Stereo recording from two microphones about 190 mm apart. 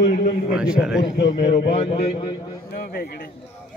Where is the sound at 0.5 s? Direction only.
5° right (ahead or behind).